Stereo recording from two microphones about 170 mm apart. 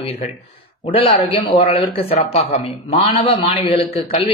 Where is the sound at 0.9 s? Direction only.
35° left (ahead or behind).